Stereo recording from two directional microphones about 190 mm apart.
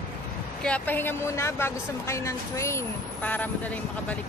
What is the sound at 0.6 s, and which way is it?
Speech, 10° left (ahead or behind).